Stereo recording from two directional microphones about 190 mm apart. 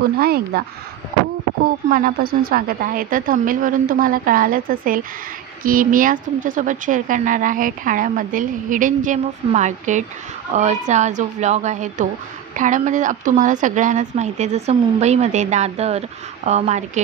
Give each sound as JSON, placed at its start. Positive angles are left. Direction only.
{"t": 0.2, "sound": "speech", "side_deg": -55}
{"t": 1.9, "sound": "a woman's voice", "side_deg": -50}